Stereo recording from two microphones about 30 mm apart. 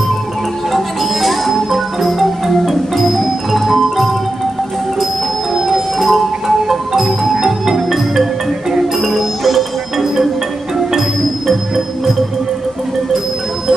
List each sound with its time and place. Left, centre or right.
0.7 s music: centre
5.5 s music: centre